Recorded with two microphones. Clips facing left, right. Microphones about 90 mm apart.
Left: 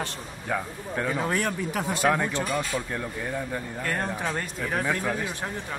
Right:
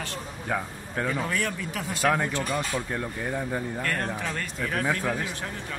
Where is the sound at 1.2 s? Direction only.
30° left (ahead or behind).